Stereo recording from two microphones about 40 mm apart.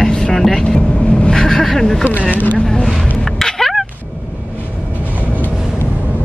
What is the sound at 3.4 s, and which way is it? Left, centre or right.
Music, centre.